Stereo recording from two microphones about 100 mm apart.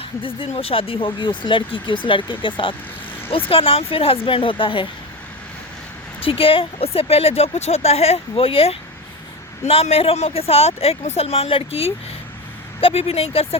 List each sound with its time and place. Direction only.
0.0 s speech: 60° left (ahead or behind)
3.5 s speech: 65° left (ahead or behind)
6.1 s speech: 65° left (ahead or behind)
9.6 s speech: 80° left